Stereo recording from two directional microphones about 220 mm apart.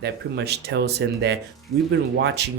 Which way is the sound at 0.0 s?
50° right (ahead or behind).